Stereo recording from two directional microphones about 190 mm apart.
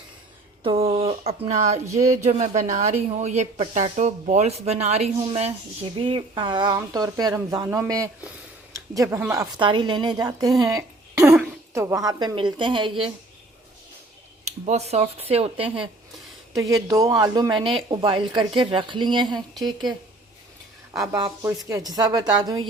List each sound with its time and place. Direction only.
0.6 s a sound: 30° right (ahead or behind)
2.0 s a woman's voice: 40° right (ahead or behind); by 9.5 s 15° right (ahead or behind)
9.6 s a woman's voice: 25° right (ahead or behind)
14.7 s a woman's voice: 35° right (ahead or behind)
16.6 s speech: 20° right (ahead or behind)
20.9 s a woman's voice: 15° right (ahead or behind)